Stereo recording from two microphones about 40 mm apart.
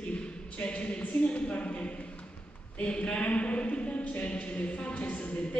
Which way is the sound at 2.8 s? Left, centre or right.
Left.